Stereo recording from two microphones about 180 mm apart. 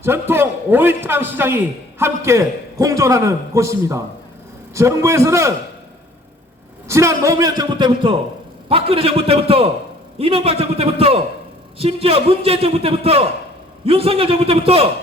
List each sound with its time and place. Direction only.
0.0 s a man's voice: 10° right (ahead or behind)
6.8 s a man's voice: 15° right (ahead or behind); by 14.8 s 30° right (ahead or behind)